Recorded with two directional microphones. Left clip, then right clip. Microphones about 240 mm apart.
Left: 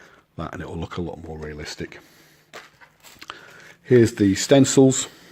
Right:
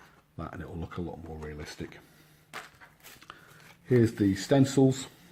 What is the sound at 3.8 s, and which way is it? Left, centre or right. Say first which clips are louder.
Speech: left 9 dB; left.